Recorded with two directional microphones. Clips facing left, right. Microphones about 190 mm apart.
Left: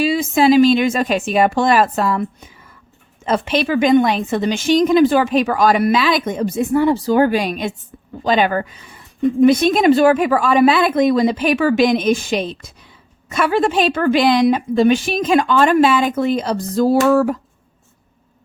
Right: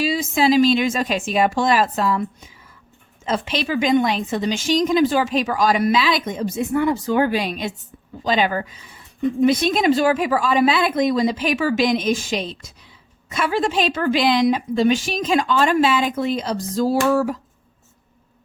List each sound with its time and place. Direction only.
0.0 s a woman's voice: 55° left (ahead or behind)
6.7 s a woman's voice: 30° left (ahead or behind); by 17.4 s 55° left (ahead or behind)